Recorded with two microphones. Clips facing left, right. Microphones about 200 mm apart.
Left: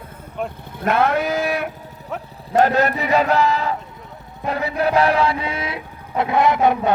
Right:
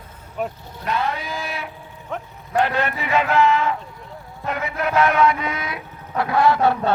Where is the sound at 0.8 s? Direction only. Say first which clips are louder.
Left 7 dB; 55° left (ahead or behind).